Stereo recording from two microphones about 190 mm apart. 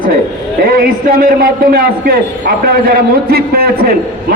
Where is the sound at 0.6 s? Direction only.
50° right (ahead or behind).